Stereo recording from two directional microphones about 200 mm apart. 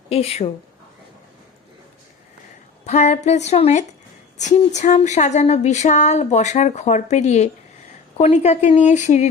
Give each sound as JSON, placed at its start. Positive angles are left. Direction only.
{"t": 0.1, "sound": "speech", "side_deg": 30}
{"t": 2.8, "sound": "speech", "side_deg": 35}